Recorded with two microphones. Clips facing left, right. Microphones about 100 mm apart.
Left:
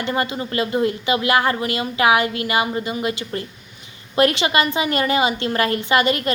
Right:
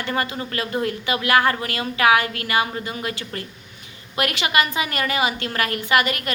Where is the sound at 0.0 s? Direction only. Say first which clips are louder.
Left 3 dB; 20° left (ahead or behind).